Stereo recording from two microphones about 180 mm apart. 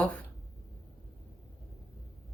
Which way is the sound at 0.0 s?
5° left (ahead or behind).